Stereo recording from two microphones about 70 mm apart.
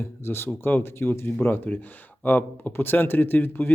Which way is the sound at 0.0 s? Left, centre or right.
Left.